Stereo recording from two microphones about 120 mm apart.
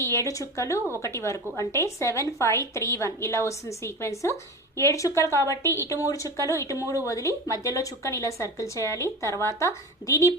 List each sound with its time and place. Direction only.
0.0 s speech: 25° left (ahead or behind)